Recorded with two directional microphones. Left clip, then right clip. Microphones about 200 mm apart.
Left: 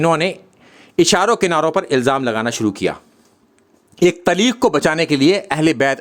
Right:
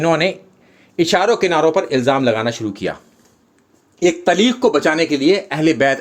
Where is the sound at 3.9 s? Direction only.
40° left (ahead or behind).